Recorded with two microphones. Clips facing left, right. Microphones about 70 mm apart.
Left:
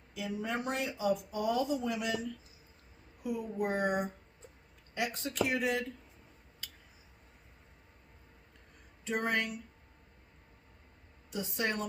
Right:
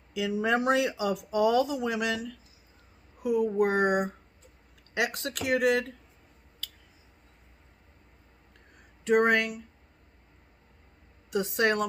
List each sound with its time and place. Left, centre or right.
0.1 s speech: right
3.2 s speech: right
6.6 s a sound: left
9.0 s a woman's voice: right
11.3 s a woman's voice: right